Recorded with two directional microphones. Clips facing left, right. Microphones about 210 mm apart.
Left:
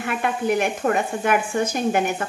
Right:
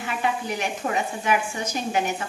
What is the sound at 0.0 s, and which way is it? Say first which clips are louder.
A woman's voice: left 4 dB; 55° left (ahead or behind).